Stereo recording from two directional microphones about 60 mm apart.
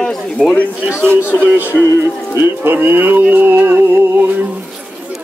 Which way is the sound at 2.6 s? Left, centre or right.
Right.